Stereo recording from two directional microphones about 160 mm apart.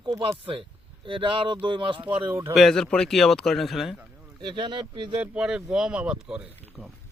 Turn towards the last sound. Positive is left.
turn(degrees=-5)  # may be behind; listen again after turning